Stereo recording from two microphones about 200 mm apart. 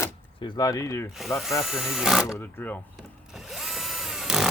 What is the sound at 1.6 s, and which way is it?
Speech, centre (ahead or behind).